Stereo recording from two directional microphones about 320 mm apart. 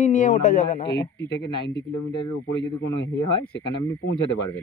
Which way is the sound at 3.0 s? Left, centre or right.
Left.